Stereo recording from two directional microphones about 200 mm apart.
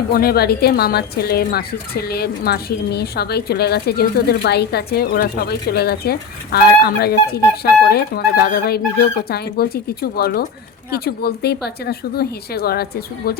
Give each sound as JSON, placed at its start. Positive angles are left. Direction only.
{"t": 0.1, "sound": "speech", "side_deg": 50}